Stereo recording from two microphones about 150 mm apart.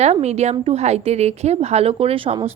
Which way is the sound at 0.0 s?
45° right (ahead or behind).